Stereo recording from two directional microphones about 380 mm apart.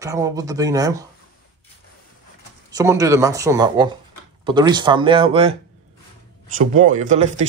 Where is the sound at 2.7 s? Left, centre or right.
Centre.